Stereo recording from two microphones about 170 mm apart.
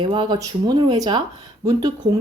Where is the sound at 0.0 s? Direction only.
25° right (ahead or behind).